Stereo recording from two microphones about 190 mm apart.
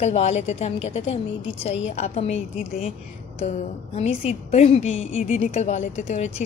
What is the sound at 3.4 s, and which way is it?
A woman's voice, 35° left (ahead or behind).